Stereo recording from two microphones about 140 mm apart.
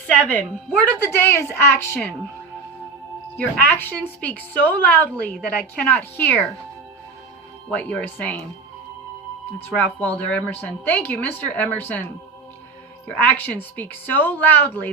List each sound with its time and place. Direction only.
0.2 s a woman's voice: 10° left (ahead or behind)
3.3 s a woman's voice: 10° left (ahead or behind)
7.7 s a woman's voice: 10° left (ahead or behind)
9.7 s a woman's voice: 10° left (ahead or behind)
13.2 s a woman's voice: 10° left (ahead or behind)